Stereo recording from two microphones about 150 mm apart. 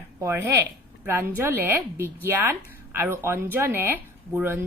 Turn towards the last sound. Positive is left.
turn(degrees=-15)  # may be behind; listen again after turning